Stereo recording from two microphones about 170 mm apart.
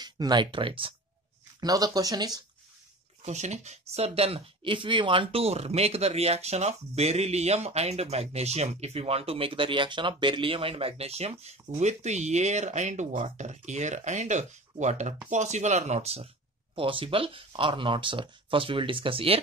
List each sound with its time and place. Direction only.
0.0 s speech: 25° right (ahead or behind)
3.2 s speech: 40° right (ahead or behind)